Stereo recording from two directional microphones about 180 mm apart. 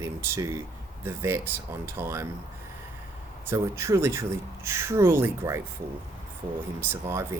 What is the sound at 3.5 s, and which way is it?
Speech, 15° right (ahead or behind).